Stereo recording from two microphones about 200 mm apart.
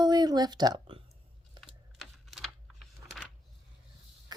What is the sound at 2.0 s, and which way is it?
Typing, centre (ahead or behind).